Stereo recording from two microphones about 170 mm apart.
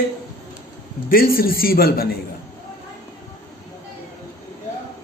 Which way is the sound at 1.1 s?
60° left (ahead or behind).